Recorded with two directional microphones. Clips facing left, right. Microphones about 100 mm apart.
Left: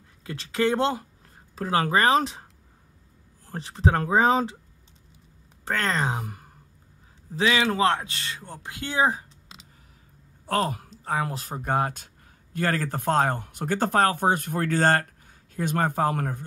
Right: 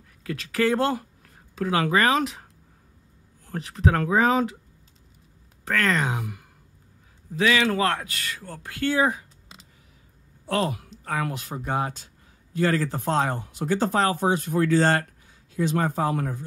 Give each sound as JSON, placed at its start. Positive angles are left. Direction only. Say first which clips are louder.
{"t": 0.2, "sound": "speech", "louder": "right 1 dB", "side_deg": 25}
{"t": 1.5, "sound": "speech", "louder": "right 1 dB", "side_deg": 35}
{"t": 3.4, "sound": "a man's voice", "louder": "right 1 dB", "side_deg": 30}
{"t": 5.7, "sound": "speech", "louder": "right 2 dB", "side_deg": 30}
{"t": 7.3, "sound": "a man's voice", "louder": "right 1 dB", "side_deg": 25}
{"t": 10.5, "sound": "speech", "louder": "even", "side_deg": 40}
{"t": 11.1, "sound": "a man's voice", "louder": "left 1 dB", "side_deg": 30}
{"t": 11.4, "sound": "speech", "louder": "left 2 dB", "side_deg": 45}